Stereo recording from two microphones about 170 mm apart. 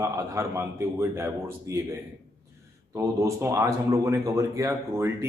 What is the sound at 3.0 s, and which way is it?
Speech, 15° right (ahead or behind).